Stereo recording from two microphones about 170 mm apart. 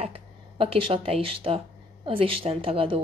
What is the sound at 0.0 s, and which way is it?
Speech, 35° right (ahead or behind).